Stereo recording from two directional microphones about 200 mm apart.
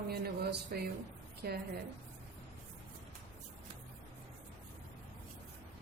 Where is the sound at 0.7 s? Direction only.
45° right (ahead or behind).